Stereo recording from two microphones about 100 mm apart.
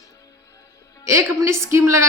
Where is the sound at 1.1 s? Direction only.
30° right (ahead or behind).